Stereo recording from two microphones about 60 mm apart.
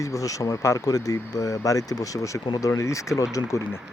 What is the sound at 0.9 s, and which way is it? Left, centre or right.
Speech, left.